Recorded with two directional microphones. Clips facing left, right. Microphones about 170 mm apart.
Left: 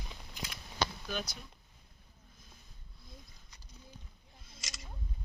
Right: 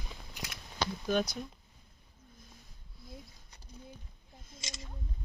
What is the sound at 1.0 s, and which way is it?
Speech, 50° right (ahead or behind).